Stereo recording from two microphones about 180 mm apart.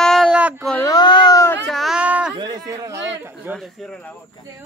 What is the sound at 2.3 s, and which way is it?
Speech, 20° right (ahead or behind).